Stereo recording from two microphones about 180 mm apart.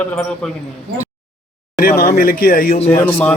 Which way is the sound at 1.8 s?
50° left (ahead or behind).